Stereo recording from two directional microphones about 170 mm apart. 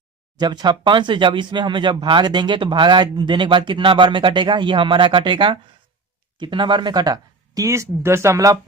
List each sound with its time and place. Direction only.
0.3 s speech: 25° right (ahead or behind)